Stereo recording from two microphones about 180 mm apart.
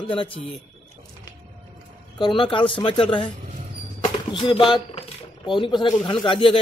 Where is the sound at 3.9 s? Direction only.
30° left (ahead or behind).